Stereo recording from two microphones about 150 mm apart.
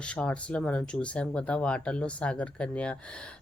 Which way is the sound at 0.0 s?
5° left (ahead or behind).